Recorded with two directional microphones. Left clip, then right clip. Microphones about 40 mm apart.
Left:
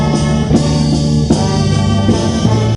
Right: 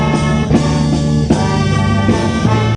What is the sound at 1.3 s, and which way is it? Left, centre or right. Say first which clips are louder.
Music: right 1 dB; right.